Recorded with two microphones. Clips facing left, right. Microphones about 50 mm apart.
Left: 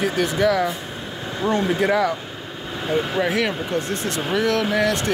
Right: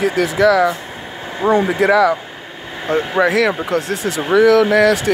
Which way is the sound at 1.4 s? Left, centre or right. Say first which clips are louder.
Right 6 dB; right.